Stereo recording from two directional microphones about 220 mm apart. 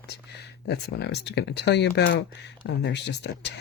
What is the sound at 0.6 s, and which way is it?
Speech, 50° left (ahead or behind).